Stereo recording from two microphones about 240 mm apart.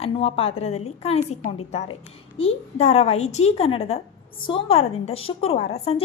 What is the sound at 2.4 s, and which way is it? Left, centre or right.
A woman's voice, left.